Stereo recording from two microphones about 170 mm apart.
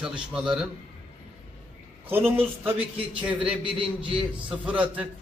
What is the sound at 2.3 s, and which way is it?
A man's voice, 10° right (ahead or behind).